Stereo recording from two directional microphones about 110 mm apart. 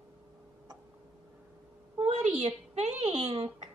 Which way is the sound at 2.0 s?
65° right (ahead or behind).